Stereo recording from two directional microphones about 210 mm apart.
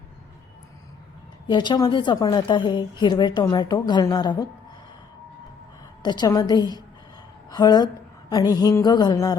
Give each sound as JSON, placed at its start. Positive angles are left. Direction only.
{"t": 1.5, "sound": "a woman's voice", "side_deg": 20}
{"t": 6.0, "sound": "a woman's voice", "side_deg": 20}